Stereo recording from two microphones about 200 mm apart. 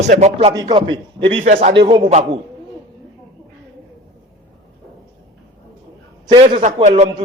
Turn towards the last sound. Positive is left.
turn(degrees=-30)  # may be behind; listen again after turning